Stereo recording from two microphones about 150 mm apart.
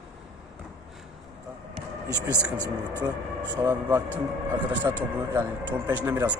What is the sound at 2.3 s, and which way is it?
Speech, 15° left (ahead or behind).